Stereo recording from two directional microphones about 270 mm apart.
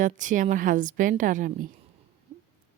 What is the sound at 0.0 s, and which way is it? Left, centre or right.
A woman's voice, right.